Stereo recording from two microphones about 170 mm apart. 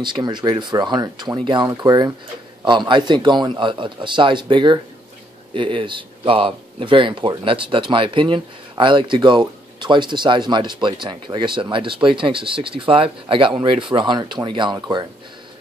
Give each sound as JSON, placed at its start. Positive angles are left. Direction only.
{"t": 0.0, "sound": "speech", "side_deg": -25}